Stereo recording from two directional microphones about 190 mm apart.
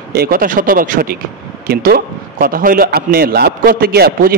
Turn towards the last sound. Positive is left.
turn(degrees=-55)  # may be behind; listen again after turning